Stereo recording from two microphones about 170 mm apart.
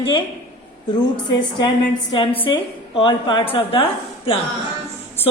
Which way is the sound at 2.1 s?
30° left (ahead or behind).